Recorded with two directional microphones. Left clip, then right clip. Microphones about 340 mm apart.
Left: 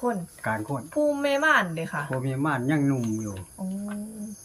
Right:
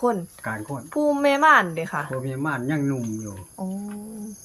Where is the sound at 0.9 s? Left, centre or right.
Centre.